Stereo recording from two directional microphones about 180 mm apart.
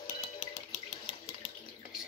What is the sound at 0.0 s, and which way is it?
Music, 45° left (ahead or behind).